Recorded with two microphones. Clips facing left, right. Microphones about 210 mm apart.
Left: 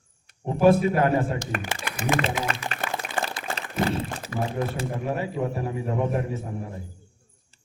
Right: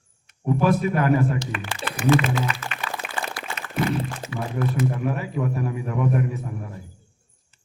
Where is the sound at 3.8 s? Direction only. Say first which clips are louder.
Right 2 dB; 35° left (ahead or behind).